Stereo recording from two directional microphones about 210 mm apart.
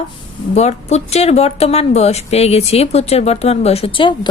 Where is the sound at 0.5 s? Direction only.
30° left (ahead or behind).